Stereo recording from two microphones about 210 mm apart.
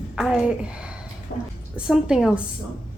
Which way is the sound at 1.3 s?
40° left (ahead or behind).